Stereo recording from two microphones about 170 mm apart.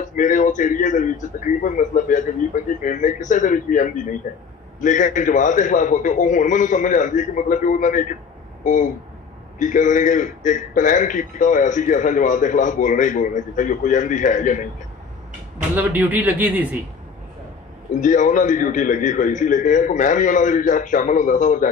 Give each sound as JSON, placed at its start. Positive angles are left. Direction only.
{"t": 0.1, "sound": "a man's voice", "side_deg": 50}
{"t": 9.6, "sound": "a man's voice", "side_deg": 50}
{"t": 15.7, "sound": "a man's voice", "side_deg": -10}
{"t": 18.0, "sound": "a man's voice", "side_deg": 50}